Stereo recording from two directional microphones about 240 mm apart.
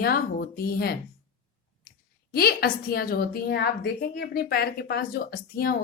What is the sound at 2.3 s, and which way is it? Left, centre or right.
A woman's voice, left.